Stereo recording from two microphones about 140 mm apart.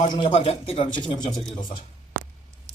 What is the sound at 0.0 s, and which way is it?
A man's voice, 35° left (ahead or behind).